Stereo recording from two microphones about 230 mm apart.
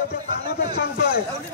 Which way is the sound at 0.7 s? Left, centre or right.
Left.